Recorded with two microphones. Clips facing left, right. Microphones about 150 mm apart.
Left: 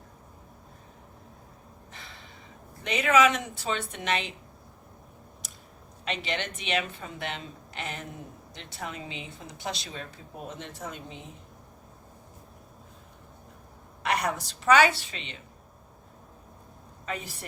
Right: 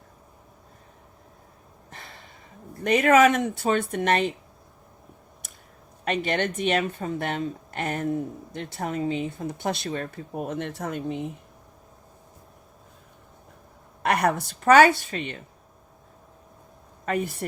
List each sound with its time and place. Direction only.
1.9 s snort: 50° right (ahead or behind)
2.8 s a woman's voice: 50° right (ahead or behind)
5.4 s a sound: 55° right (ahead or behind)
6.1 s a woman's voice: 50° right (ahead or behind)
14.0 s a woman's voice: 55° right (ahead or behind)
17.1 s a woman's voice: 55° right (ahead or behind)